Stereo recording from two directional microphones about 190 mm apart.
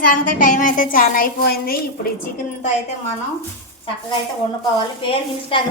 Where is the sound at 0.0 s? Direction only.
45° left (ahead or behind).